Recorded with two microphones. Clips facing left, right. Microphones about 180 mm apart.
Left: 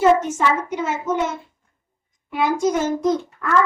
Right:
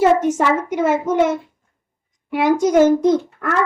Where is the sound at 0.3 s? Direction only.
55° right (ahead or behind).